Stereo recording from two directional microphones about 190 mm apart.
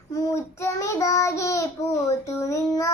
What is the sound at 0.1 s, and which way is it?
Child singing, 15° left (ahead or behind).